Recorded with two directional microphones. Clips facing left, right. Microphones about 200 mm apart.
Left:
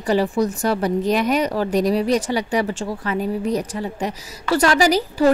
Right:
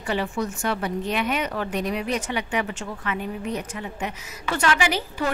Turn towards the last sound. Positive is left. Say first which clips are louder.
# left 8 dB
turn(degrees=40)  # may be behind; listen again after turning